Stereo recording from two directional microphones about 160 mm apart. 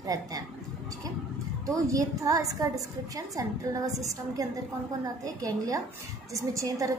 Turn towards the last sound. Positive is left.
turn(degrees=-20)  # may be behind; listen again after turning